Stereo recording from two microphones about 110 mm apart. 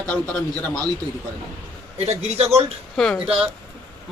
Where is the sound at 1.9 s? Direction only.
75° right (ahead or behind).